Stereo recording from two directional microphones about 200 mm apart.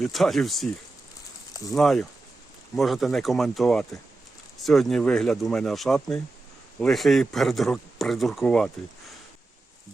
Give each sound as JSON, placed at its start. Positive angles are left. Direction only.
{"t": 0.0, "sound": "a man's voice", "side_deg": 0}
{"t": 1.7, "sound": "a man's voice", "side_deg": 0}